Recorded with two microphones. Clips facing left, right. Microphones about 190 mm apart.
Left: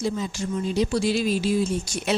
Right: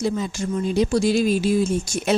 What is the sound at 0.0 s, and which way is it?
A woman's voice, 55° right (ahead or behind).